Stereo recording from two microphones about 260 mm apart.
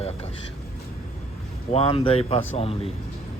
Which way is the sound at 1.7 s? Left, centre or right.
Left.